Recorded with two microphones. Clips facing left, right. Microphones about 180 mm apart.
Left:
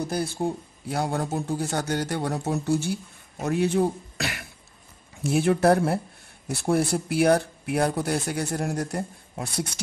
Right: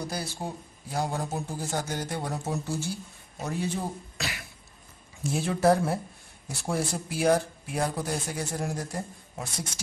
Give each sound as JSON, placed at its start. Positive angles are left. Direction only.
{"t": 0.8, "sound": "speech", "side_deg": 65}